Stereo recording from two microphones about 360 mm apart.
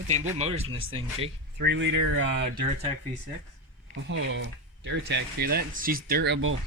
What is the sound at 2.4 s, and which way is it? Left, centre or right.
Speech, centre.